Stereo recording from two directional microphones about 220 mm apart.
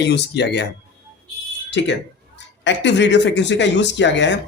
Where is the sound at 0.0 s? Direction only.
50° left (ahead or behind).